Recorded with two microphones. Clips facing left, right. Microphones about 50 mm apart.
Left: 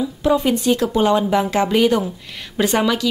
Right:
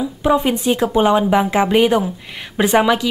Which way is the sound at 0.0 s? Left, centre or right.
Centre.